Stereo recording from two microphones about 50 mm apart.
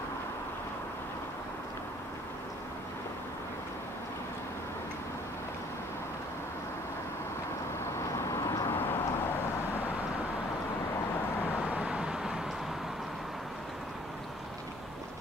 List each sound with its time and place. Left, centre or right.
8.3 s vehicle: left
8.7 s vehicle: left
11.5 s vehicle: right